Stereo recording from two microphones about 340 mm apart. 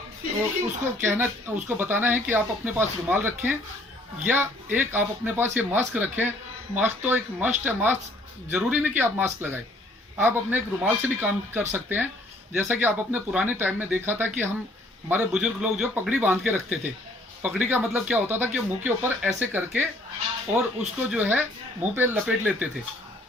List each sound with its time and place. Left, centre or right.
1.0 s speech: centre